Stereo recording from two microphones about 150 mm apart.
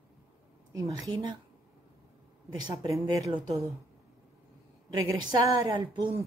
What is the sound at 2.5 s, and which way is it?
Speech, 25° right (ahead or behind).